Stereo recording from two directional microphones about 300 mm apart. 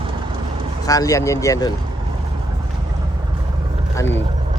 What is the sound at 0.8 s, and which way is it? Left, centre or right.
Speech, centre.